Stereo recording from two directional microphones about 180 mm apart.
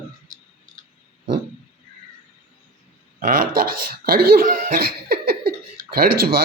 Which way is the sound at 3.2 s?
50° right (ahead or behind).